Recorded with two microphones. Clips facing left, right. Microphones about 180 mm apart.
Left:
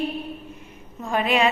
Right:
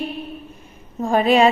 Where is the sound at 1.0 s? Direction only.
35° right (ahead or behind).